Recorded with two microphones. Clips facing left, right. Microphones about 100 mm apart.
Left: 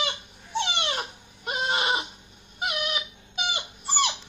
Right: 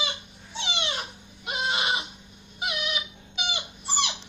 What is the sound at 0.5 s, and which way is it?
Dog, 50° left (ahead or behind).